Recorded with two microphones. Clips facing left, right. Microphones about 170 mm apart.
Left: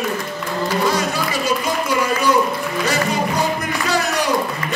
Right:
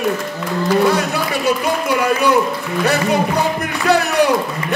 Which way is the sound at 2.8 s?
60° right (ahead or behind).